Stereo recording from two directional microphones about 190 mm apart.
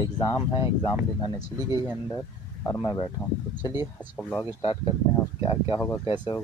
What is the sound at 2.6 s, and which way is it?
Speech, 25° left (ahead or behind).